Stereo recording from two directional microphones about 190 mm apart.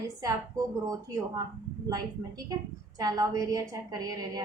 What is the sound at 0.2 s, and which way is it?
A woman's voice, 20° right (ahead or behind).